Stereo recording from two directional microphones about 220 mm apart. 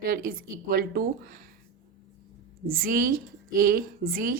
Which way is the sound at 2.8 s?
40° right (ahead or behind).